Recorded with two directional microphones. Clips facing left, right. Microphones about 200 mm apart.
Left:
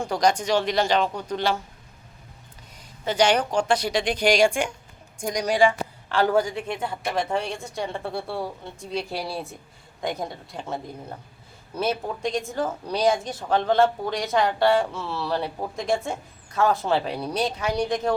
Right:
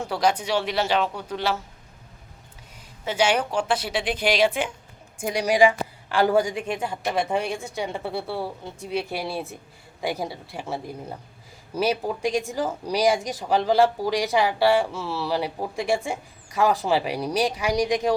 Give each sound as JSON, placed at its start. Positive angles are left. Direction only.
{"t": 0.0, "sound": "speech", "side_deg": -5}
{"t": 3.0, "sound": "speech", "side_deg": -5}